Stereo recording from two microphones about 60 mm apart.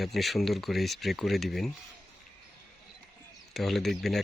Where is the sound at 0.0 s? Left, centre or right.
Centre.